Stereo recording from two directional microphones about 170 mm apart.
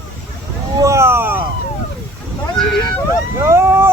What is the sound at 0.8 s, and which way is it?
Vehicle, 15° right (ahead or behind).